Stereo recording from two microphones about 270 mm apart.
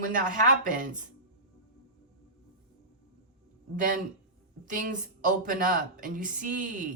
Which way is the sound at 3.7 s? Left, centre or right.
Right.